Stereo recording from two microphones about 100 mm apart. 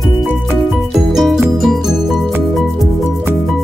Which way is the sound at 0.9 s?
Centre (ahead or behind).